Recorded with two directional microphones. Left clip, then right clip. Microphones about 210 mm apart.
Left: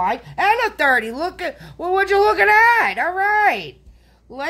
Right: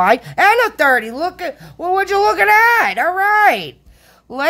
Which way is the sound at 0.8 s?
15° right (ahead or behind).